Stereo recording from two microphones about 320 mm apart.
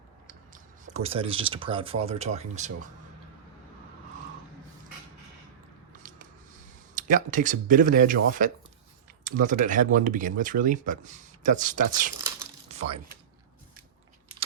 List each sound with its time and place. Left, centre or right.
0.3 s speech: right
6.0 s a sound: right
6.9 s speech: right